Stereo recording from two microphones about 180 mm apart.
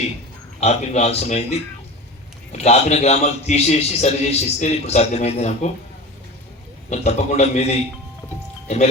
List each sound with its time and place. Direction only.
0.6 s a man's voice: 35° left (ahead or behind)
6.9 s a man's voice: 40° left (ahead or behind)